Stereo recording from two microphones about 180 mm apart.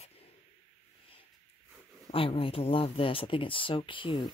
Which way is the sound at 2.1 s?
30° left (ahead or behind).